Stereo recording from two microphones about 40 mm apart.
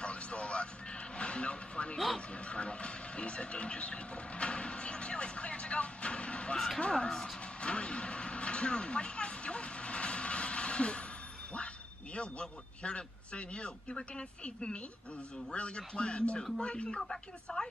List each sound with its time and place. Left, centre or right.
0.0 s music: left
2.1 s speech: left
7.6 s vehicle: left
11.5 s a man's voice: left